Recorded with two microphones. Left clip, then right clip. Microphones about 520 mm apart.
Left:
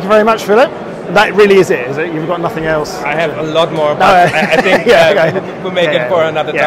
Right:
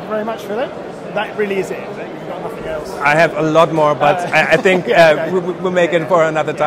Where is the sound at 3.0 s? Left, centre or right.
Right.